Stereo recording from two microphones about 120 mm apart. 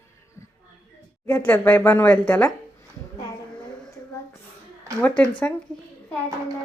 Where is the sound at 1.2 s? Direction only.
15° left (ahead or behind).